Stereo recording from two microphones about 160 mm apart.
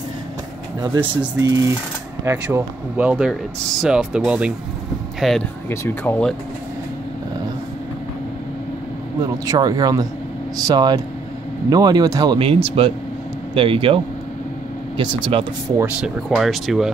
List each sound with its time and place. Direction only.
1.4 s speech: 20° right (ahead or behind); by 5.4 s centre (ahead or behind)
5.7 s speech: 10° left (ahead or behind)
9.2 s speech: 25° right (ahead or behind)
15.8 s speech: 5° right (ahead or behind)